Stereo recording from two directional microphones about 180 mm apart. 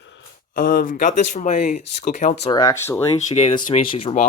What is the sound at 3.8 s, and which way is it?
Speech, 30° left (ahead or behind).